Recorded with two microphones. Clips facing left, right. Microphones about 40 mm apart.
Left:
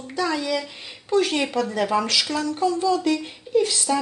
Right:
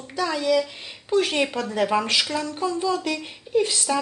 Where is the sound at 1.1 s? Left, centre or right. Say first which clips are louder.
Even; centre.